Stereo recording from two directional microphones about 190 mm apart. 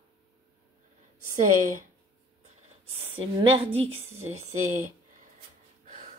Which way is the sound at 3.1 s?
25° right (ahead or behind).